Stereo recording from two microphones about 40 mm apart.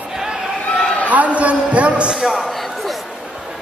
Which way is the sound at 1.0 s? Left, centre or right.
Right.